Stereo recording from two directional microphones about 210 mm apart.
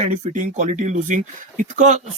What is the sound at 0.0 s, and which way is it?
A man's voice, 35° right (ahead or behind).